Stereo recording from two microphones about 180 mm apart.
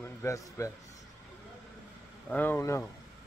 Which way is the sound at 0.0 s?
15° left (ahead or behind).